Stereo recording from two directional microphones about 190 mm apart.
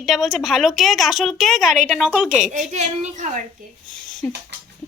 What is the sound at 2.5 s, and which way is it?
Speech, 40° right (ahead or behind).